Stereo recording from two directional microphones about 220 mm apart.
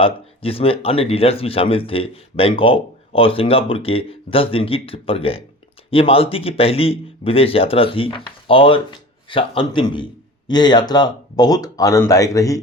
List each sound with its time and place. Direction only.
0.0 s speech: 25° left (ahead or behind)